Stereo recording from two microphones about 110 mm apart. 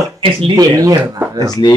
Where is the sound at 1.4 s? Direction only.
35° left (ahead or behind).